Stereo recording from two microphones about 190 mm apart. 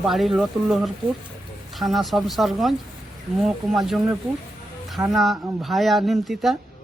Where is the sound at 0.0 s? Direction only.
Centre (ahead or behind).